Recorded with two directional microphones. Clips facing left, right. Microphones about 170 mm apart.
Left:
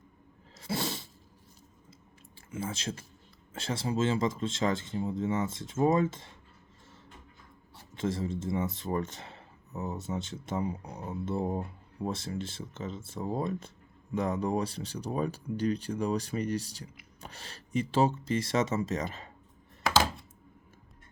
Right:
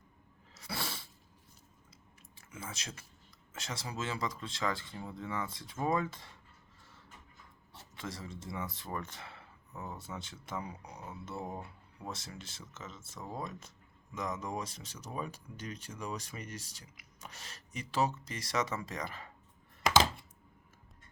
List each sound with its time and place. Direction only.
0.6 s sneeze: 20° left (ahead or behind)
2.5 s speech: 30° left (ahead or behind)
7.9 s speech: 25° left (ahead or behind)
19.8 s a sound: 20° right (ahead or behind)